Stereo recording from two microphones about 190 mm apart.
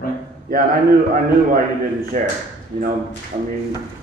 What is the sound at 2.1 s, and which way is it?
Speech, 45° right (ahead or behind).